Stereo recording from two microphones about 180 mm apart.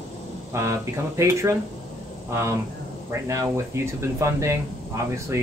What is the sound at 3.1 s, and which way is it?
Speech, 15° right (ahead or behind).